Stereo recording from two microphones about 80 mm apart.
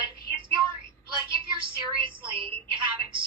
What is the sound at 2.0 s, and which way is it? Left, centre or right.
Speech, right.